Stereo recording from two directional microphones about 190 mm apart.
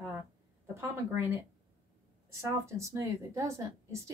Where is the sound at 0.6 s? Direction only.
15° right (ahead or behind).